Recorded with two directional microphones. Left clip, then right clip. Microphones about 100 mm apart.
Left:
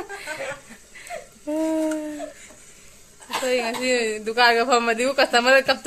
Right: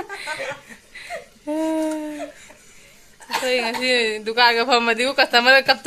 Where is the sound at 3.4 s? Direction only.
Centre (ahead or behind).